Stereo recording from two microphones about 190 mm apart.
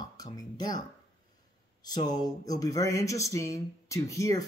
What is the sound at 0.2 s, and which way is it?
Speech, 20° left (ahead or behind).